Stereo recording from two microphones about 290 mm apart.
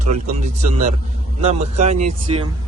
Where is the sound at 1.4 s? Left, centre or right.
Right.